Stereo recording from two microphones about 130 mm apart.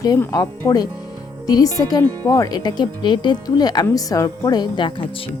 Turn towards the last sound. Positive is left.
turn(degrees=35)  # may be behind; listen again after turning